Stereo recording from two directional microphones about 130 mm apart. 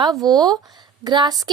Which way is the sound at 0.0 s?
30° right (ahead or behind).